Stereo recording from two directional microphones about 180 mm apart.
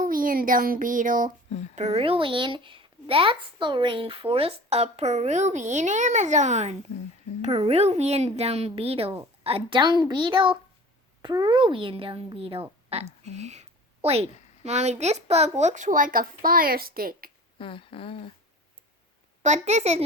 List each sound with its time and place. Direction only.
0.0 s a child's voice: 50° right (ahead or behind)
17.6 s a sound: 30° left (ahead or behind)
19.4 s speech: 40° right (ahead or behind)